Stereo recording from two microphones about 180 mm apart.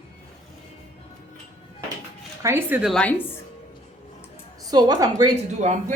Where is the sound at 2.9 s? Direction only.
5° left (ahead or behind).